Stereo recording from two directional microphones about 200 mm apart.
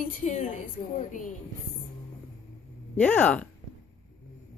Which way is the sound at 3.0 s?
5° left (ahead or behind).